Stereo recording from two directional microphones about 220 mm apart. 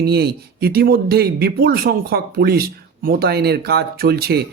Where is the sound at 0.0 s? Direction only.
45° right (ahead or behind).